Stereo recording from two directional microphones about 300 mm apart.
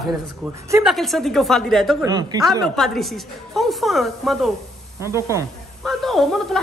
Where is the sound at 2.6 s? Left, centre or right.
Centre.